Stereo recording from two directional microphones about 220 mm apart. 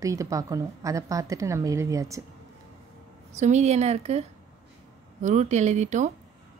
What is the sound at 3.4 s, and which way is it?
A woman's voice, 30° right (ahead or behind).